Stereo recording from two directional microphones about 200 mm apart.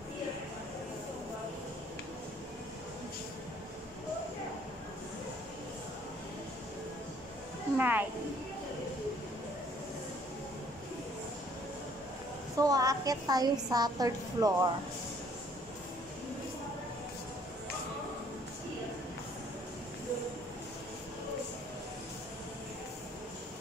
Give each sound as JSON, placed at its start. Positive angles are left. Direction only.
{"t": 7.7, "sound": "a woman's voice", "side_deg": -10}
{"t": 12.5, "sound": "a woman's voice", "side_deg": -15}